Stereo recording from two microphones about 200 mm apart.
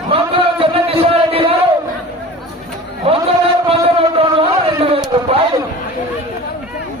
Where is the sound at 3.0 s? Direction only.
30° right (ahead or behind).